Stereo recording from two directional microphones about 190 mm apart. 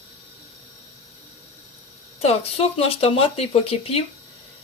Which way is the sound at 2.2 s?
30° left (ahead or behind).